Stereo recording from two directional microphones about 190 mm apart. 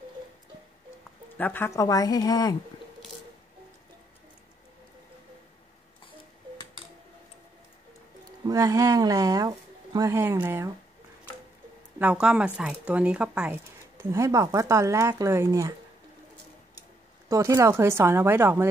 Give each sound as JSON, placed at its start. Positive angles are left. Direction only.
{"t": 1.4, "sound": "a woman's voice", "side_deg": 10}
{"t": 8.5, "sound": "speech", "side_deg": -15}
{"t": 12.0, "sound": "speech", "side_deg": -5}
{"t": 17.3, "sound": "speech", "side_deg": -15}